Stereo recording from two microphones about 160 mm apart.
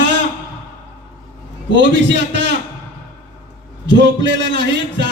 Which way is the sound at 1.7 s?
90° right.